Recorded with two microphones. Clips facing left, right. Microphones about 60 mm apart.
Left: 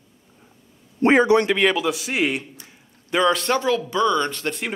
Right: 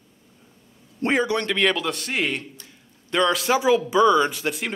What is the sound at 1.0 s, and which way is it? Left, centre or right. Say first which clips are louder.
Speech: left 7 dB; left.